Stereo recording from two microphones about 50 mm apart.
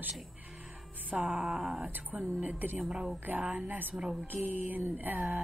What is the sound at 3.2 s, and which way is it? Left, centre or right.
Speech, right.